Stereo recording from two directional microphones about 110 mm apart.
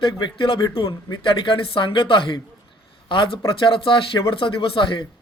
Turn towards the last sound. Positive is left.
turn(degrees=50)  # may be behind; listen again after turning